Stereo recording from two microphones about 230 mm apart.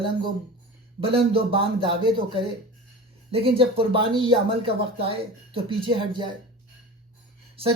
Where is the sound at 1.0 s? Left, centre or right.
Right.